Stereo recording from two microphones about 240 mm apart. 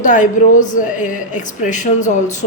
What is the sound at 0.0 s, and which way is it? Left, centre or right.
Speech, left.